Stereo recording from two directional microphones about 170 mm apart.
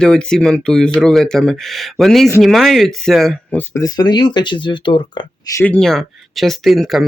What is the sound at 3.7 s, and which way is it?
Speech, 20° left (ahead or behind).